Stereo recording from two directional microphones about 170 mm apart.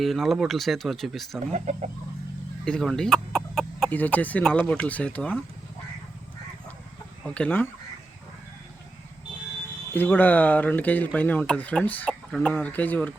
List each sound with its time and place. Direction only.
0.0 s speech: centre (ahead or behind)
1.5 s speech: 45° right (ahead or behind)
2.6 s speech: 5° left (ahead or behind)
7.3 s speech: 5° left (ahead or behind)
9.9 s speech: 10° left (ahead or behind)